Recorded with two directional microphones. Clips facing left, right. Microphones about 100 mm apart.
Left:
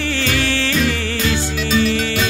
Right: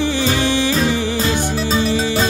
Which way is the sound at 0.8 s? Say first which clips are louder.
Right 2 dB; 30° right (ahead or behind).